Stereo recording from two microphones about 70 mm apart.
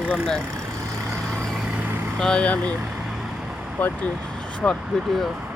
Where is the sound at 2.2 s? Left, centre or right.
Centre.